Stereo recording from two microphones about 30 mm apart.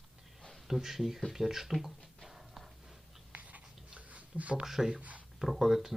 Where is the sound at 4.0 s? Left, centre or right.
Right.